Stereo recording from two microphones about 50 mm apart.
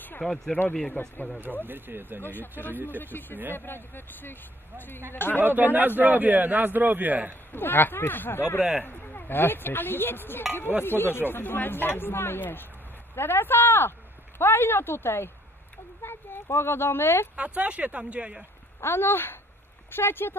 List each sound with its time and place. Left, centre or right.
0.2 s speech: centre
1.0 s speech: left
1.6 s speech: right
2.2 s speech: left
2.7 s a man's voice: right
3.0 s speech: left
5.4 s a man's voice: right
7.5 s speech: left
17.4 s speech: right
18.8 s speech: left